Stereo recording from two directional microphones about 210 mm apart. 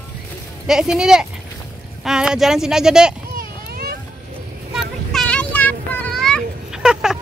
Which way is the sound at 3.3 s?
45° right (ahead or behind).